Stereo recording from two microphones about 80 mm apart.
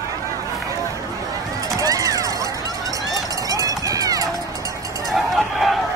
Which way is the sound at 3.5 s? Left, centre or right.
Right.